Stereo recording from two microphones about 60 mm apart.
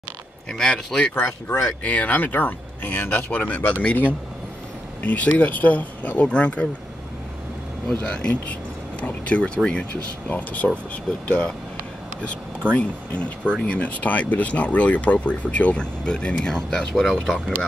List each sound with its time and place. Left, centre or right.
0.5 s speech: centre
1.8 s speech: left
5.0 s speech: left
8.0 s speech: centre
12.7 s speech: left